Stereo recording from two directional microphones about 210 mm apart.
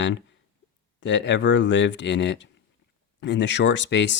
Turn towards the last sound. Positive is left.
turn(degrees=60)  # may be behind; listen again after turning